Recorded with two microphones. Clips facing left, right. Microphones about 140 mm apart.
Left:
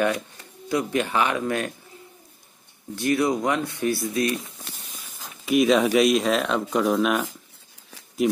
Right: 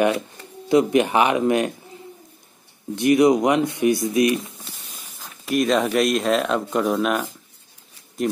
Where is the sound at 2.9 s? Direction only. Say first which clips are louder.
Right 7 dB; 20° right (ahead or behind).